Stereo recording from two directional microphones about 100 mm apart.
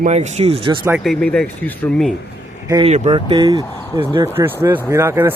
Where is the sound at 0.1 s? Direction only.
90° right.